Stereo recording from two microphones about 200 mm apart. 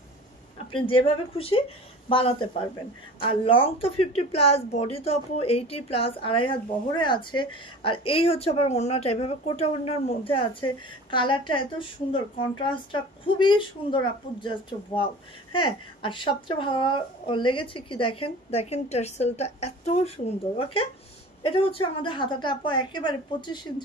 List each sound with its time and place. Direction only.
0.7 s a woman's voice: 25° left (ahead or behind)